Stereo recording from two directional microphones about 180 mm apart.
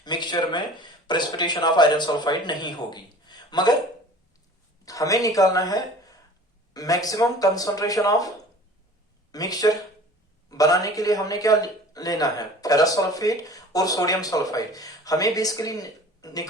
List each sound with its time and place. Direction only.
0.0 s a man's voice: 25° left (ahead or behind)
4.9 s a man's voice: 20° left (ahead or behind)
9.3 s a man's voice: 20° left (ahead or behind)